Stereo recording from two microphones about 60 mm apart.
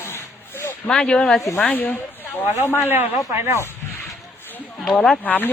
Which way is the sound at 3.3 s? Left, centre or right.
Right.